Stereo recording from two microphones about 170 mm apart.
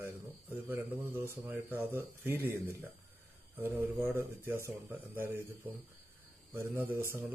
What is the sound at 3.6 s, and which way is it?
Speech, 15° right (ahead or behind).